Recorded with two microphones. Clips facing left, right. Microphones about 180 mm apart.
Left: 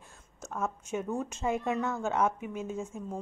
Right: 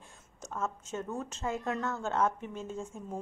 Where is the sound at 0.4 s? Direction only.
10° left (ahead or behind).